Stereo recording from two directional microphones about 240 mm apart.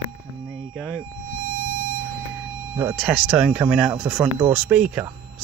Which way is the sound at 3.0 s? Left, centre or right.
Centre.